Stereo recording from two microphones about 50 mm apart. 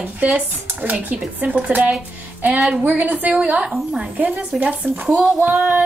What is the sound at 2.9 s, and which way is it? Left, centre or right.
Speech, right.